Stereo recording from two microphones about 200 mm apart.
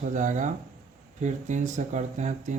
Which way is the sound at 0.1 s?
40° right (ahead or behind).